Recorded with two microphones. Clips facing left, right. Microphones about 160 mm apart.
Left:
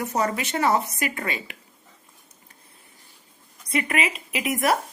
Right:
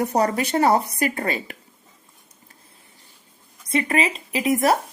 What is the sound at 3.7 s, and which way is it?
A woman's voice, 30° right (ahead or behind).